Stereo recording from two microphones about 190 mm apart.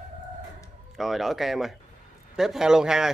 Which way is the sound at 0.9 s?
Centre (ahead or behind).